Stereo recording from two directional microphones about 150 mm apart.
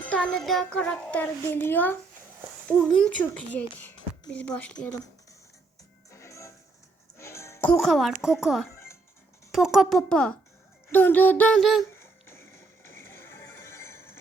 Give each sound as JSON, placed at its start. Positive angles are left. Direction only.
{"t": 0.0, "sound": "a child's voice", "side_deg": 5}
{"t": 6.1, "sound": "music", "side_deg": 20}
{"t": 7.8, "sound": "a child's voice", "side_deg": 0}
{"t": 11.6, "sound": "a child's voice", "side_deg": 0}
{"t": 11.9, "sound": "music", "side_deg": 15}